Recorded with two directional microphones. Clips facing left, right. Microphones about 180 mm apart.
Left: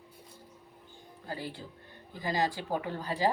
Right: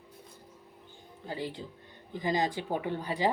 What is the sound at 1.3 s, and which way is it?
Speech, 20° right (ahead or behind).